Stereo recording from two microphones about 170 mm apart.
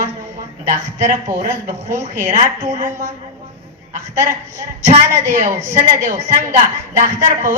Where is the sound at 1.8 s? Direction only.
15° right (ahead or behind).